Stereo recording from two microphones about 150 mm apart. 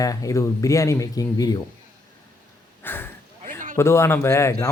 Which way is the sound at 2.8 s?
15° left (ahead or behind).